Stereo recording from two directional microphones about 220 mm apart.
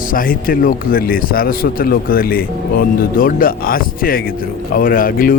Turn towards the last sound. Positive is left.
turn(degrees=40)  # may be behind; listen again after turning